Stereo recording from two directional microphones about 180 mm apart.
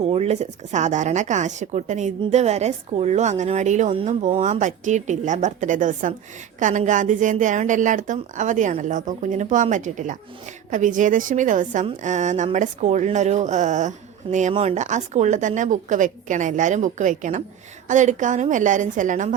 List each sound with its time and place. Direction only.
0.0 s a woman's voice: 35° right (ahead or behind)